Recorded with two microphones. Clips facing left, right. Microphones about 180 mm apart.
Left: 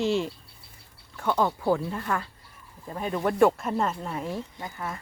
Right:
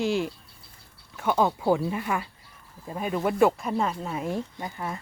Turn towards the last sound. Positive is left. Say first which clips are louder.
# right 2 dB
turn(degrees=-20)  # may be behind; listen again after turning